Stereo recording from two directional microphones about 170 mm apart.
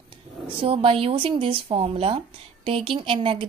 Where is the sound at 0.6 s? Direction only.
35° right (ahead or behind).